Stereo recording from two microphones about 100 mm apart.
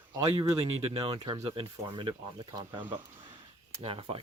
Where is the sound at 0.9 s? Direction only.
60° right (ahead or behind).